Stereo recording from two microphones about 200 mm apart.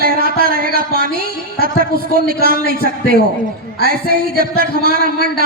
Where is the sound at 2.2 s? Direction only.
45° right (ahead or behind).